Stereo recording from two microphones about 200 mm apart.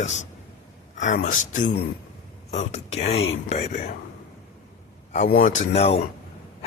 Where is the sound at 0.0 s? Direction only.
35° left (ahead or behind).